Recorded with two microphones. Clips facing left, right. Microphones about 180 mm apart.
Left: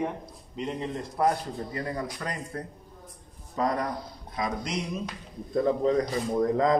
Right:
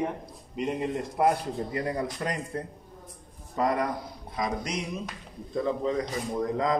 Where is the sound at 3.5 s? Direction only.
10° right (ahead or behind).